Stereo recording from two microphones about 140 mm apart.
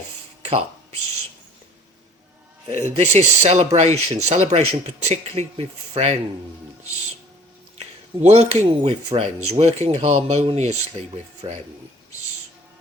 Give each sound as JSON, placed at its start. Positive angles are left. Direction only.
{"t": 2.6, "sound": "speech", "side_deg": -55}
{"t": 7.8, "sound": "speech", "side_deg": -45}